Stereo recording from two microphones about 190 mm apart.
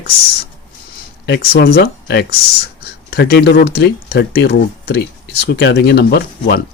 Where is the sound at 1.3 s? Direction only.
55° left (ahead or behind).